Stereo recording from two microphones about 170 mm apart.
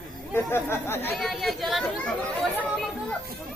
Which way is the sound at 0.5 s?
15° left (ahead or behind).